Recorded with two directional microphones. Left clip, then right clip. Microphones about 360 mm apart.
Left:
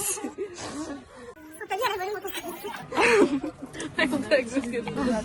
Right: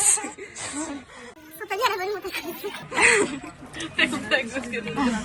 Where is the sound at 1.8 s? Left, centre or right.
Centre.